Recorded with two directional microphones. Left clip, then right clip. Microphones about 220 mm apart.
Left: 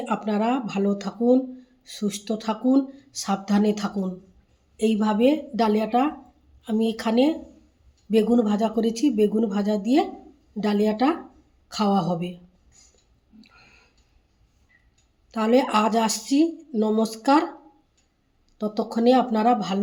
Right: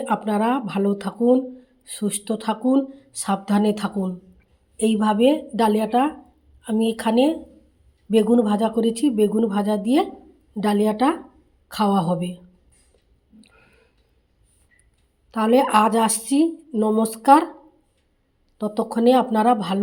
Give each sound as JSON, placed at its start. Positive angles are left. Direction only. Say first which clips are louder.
{"t": 0.0, "sound": "speech", "louder": "right 3 dB", "side_deg": -15}
{"t": 15.3, "sound": "speech", "louder": "right 3 dB", "side_deg": -15}
{"t": 18.5, "sound": "speech", "louder": "right 3 dB", "side_deg": -10}